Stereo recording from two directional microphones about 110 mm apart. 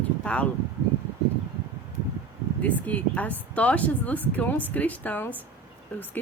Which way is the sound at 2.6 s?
15° left (ahead or behind).